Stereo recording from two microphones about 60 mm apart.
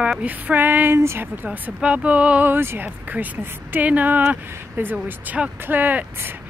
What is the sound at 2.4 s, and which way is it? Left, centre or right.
Speech, right.